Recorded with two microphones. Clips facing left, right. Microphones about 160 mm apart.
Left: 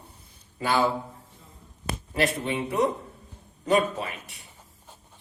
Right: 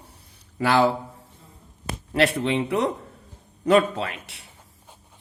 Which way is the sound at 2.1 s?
75° right (ahead or behind).